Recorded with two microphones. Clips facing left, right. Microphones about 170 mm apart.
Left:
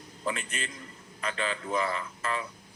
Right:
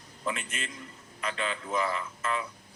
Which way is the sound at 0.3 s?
35° left (ahead or behind).